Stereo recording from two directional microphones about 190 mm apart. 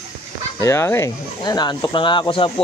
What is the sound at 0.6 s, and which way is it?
Speech, 15° left (ahead or behind).